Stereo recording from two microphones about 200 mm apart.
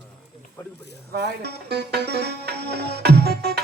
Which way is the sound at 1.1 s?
55° right (ahead or behind).